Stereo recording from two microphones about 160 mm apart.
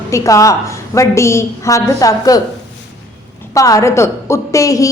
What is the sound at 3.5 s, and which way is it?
A woman's voice, 20° left (ahead or behind).